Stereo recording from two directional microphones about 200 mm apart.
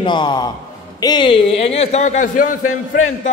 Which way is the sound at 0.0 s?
20° left (ahead or behind).